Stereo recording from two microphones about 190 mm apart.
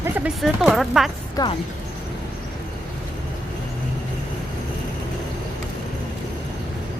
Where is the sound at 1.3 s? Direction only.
20° left (ahead or behind).